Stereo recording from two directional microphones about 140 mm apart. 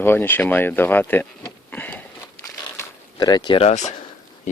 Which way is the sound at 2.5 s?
25° left (ahead or behind).